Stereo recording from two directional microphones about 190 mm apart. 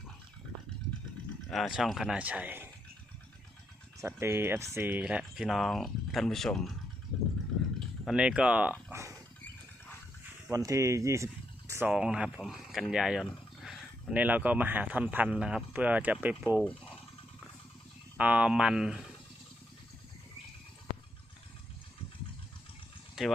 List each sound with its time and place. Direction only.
1.5 s speech: centre (ahead or behind)
4.0 s speech: 15° right (ahead or behind)
8.0 s speech: 5° right (ahead or behind)
10.5 s speech: 15° right (ahead or behind)
16.6 s speech: 5° left (ahead or behind)
18.2 s speech: 5° right (ahead or behind)
23.2 s speech: 5° right (ahead or behind)